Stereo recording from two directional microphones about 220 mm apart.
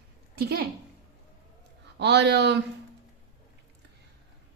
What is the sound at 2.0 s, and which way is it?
Speech, 50° right (ahead or behind).